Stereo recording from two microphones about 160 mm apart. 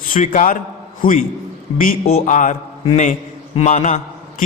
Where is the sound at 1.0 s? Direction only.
65° left (ahead or behind).